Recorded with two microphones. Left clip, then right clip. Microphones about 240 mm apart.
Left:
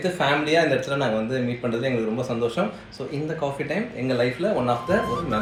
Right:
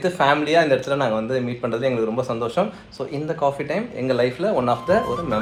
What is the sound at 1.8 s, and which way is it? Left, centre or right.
Speech, right.